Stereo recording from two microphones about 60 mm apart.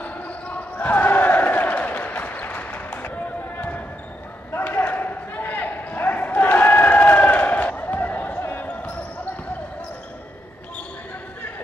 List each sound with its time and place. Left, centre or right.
0.0 s basketball bounce: left